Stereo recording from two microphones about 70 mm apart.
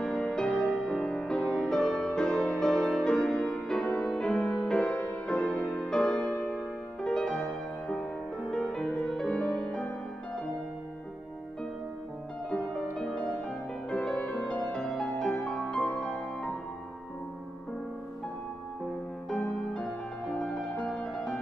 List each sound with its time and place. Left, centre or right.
0.0 s music: centre
6.2 s music: left
6.5 s music: centre
12.4 s music: centre
19.2 s music: centre